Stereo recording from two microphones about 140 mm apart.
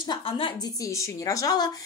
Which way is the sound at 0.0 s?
35° left (ahead or behind).